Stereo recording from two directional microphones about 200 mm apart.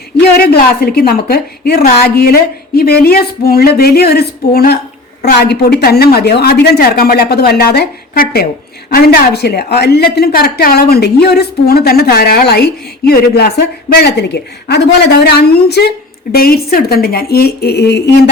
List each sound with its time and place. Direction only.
0.2 s a woman's voice: 45° left (ahead or behind)